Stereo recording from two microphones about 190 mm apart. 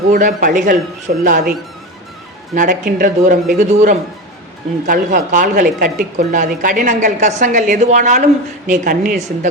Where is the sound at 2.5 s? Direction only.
45° right (ahead or behind).